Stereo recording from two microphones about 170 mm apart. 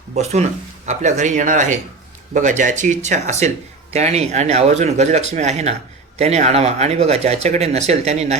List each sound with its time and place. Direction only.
0.1 s a man's voice: 40° right (ahead or behind)